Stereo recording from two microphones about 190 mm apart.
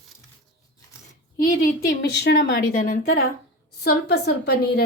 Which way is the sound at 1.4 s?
45° left (ahead or behind).